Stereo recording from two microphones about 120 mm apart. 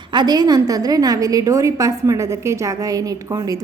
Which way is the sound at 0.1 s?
35° right (ahead or behind).